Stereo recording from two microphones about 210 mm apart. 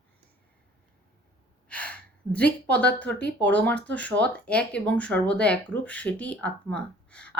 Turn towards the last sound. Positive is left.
turn(degrees=5)  # may be behind; listen again after turning